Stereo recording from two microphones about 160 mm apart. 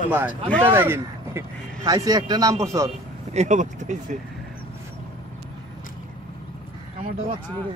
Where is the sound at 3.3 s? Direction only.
45° right (ahead or behind).